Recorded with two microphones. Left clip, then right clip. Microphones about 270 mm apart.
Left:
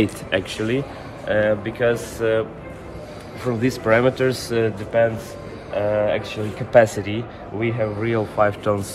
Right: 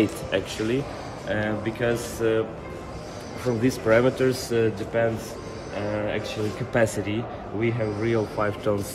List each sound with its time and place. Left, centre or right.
0.0 s speech: left
1.2 s speech: centre
3.6 s speech: centre